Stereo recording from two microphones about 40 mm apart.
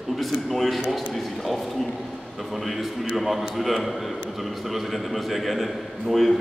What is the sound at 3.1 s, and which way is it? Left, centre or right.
A man's voice, centre.